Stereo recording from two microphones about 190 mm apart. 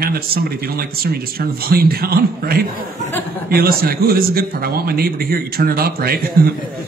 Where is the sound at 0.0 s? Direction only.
55° right (ahead or behind).